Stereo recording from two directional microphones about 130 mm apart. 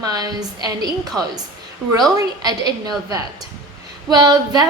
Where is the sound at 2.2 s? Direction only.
30° right (ahead or behind).